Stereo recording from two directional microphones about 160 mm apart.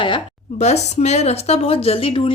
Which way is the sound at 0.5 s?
45° left (ahead or behind).